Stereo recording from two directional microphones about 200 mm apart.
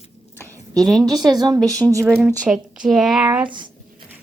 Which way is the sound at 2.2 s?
5° right (ahead or behind).